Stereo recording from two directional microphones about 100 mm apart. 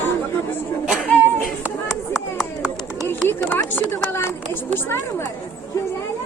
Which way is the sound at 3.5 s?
20° left (ahead or behind).